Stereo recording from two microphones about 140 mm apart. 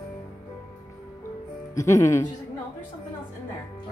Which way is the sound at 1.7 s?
20° left (ahead or behind).